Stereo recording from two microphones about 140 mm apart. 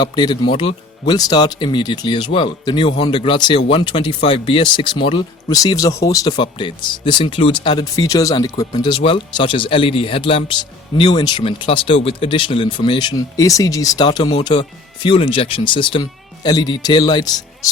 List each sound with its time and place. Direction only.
0.0 s speech: 30° left (ahead or behind)
5.5 s speech: 25° left (ahead or behind)